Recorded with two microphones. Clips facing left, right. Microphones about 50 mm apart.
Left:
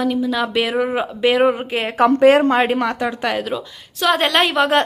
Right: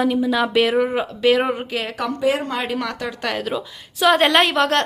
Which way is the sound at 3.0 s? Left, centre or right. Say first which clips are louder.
Left 4 dB; centre.